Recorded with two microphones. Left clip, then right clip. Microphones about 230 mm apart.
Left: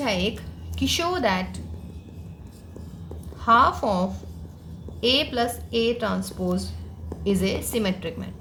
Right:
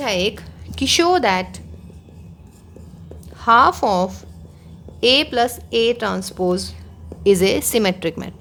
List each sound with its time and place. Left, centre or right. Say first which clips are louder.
0.0 s a woman's voice: right 5 dB; right
3.4 s a woman's voice: right 5 dB; right